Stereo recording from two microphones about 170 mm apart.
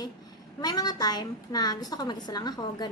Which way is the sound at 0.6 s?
25° left (ahead or behind).